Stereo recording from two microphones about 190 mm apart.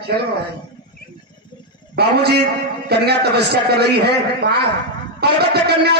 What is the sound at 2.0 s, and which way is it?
A man's voice, 60° right (ahead or behind).